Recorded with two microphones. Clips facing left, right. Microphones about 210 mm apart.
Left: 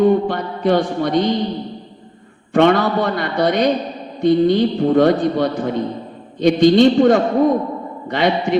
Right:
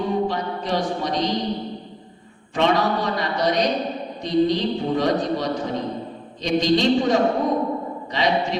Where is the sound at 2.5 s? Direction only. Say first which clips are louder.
Left 6 dB; 55° left (ahead or behind).